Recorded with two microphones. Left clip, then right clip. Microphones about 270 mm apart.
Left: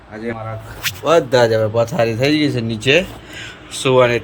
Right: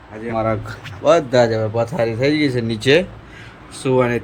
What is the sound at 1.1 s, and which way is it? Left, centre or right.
A man's voice, centre.